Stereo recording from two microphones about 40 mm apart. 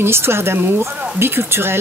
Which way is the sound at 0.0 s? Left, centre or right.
Right.